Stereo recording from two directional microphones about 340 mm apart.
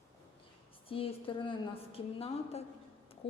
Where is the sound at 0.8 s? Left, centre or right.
Centre.